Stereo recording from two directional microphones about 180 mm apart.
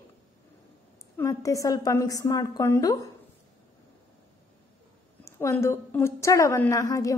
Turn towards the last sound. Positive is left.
turn(degrees=15)  # may be behind; listen again after turning